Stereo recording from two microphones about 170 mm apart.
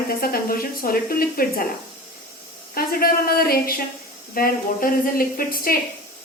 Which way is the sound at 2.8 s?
60° left (ahead or behind).